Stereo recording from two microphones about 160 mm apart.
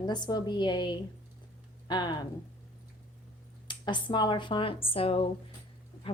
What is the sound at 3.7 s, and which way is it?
Speech, 30° left (ahead or behind).